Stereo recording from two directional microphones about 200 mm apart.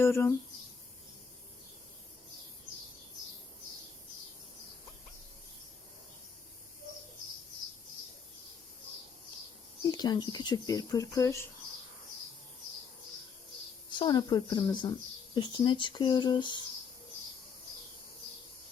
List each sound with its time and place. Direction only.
0.0 s speech: 15° left (ahead or behind)
9.8 s speech: 20° left (ahead or behind)
14.0 s speech: 20° left (ahead or behind)